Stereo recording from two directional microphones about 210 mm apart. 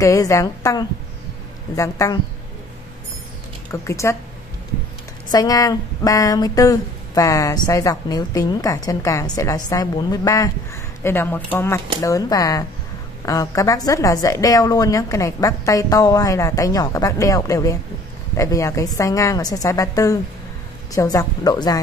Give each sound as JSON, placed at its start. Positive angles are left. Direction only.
{"t": 0.0, "sound": "a woman's voice", "side_deg": 15}
{"t": 3.7, "sound": "a woman's voice", "side_deg": 15}
{"t": 5.3, "sound": "a woman's voice", "side_deg": 15}